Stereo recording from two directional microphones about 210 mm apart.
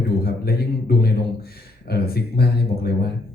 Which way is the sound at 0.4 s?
50° left (ahead or behind).